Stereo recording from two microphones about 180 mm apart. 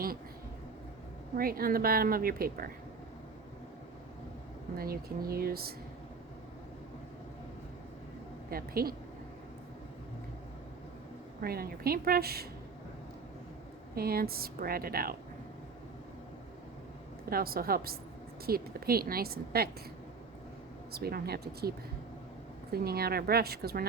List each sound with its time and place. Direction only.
1.4 s a woman's voice: 55° right (ahead or behind)
4.8 s a woman's voice: 55° right (ahead or behind)
8.4 s a woman's voice: 55° right (ahead or behind)
11.3 s a woman's voice: 55° right (ahead or behind)
13.9 s a woman's voice: 55° right (ahead or behind)
17.2 s a woman's voice: 55° right (ahead or behind)
20.9 s a woman's voice: 60° right (ahead or behind)
22.7 s a woman's voice: 60° right (ahead or behind)